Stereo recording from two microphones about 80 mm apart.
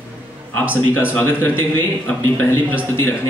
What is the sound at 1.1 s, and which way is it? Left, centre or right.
A man's voice, left.